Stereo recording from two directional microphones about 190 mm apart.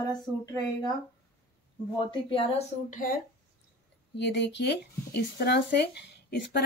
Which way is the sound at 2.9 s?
45° left (ahead or behind).